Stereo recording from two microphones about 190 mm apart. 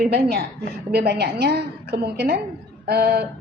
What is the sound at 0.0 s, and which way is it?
A woman's voice, 55° right (ahead or behind).